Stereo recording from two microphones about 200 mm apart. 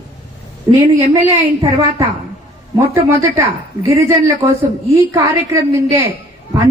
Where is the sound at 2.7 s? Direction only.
15° right (ahead or behind).